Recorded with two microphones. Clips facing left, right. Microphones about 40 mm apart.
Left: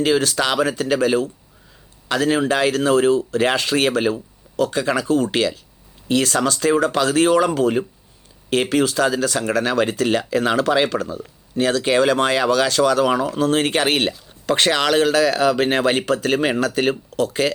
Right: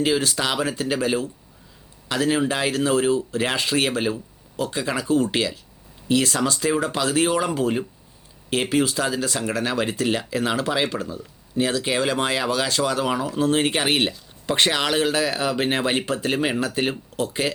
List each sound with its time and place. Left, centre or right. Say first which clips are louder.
0.0 s a man's voice: left 4 dB; left
8.7 s speech: left 3 dB; left
10.3 s a man's voice: left 8 dB; left
11.5 s speech: left 5 dB; left